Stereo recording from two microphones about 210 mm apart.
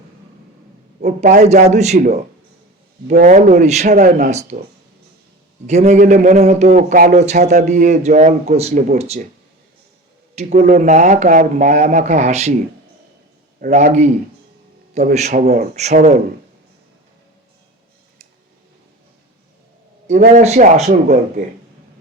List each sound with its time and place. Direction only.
1.0 s a man's voice: 35° right (ahead or behind)
5.6 s a man's voice: 35° right (ahead or behind)
10.3 s a man's voice: 30° right (ahead or behind)
13.6 s a man's voice: 40° right (ahead or behind)
20.1 s a man's voice: 35° right (ahead or behind)